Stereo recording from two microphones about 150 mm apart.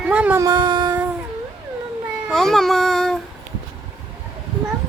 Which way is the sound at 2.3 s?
Centre (ahead or behind).